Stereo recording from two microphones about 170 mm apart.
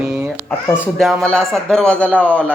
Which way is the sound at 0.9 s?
5° left (ahead or behind).